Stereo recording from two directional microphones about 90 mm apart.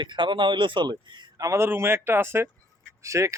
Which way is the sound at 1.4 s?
35° right (ahead or behind).